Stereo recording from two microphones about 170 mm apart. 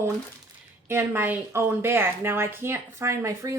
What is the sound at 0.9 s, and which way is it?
A woman's voice, 15° right (ahead or behind).